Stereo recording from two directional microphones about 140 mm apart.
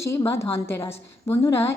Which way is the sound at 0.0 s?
20° left (ahead or behind).